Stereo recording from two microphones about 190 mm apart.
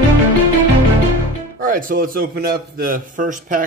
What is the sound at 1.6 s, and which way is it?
A man's voice, 45° right (ahead or behind).